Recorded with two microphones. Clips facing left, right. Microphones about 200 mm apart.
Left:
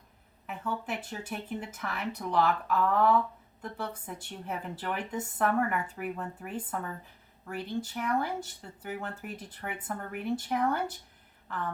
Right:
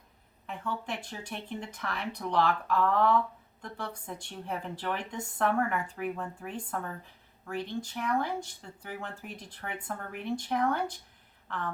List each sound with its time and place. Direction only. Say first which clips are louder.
0.4 s a woman's voice: left 1 dB; 5° left (ahead or behind)